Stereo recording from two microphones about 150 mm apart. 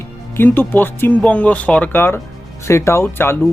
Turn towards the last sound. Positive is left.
turn(degrees=15)  # may be behind; listen again after turning